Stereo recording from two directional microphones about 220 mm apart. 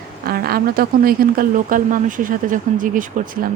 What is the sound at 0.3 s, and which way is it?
Speech, 45° right (ahead or behind).